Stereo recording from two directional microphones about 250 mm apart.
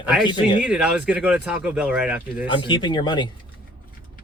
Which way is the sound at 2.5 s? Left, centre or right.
Centre.